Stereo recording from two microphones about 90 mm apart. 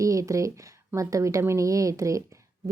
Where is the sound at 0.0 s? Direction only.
35° right (ahead or behind).